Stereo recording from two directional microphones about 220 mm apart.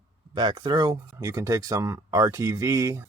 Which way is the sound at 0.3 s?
20° right (ahead or behind).